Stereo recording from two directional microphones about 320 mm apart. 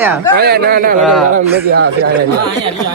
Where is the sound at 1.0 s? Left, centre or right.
Centre.